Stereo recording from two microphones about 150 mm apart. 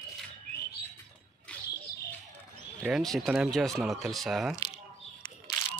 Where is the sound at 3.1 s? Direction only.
5° right (ahead or behind).